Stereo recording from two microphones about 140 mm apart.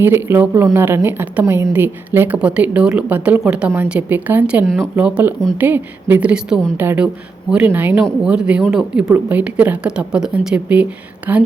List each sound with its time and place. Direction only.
0.0 s a woman's voice: 15° right (ahead or behind)